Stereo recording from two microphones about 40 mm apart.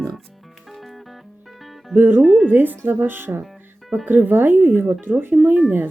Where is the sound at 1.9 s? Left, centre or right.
Right.